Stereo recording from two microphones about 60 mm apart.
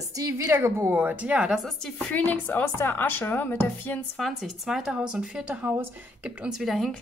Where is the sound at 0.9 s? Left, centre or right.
Right.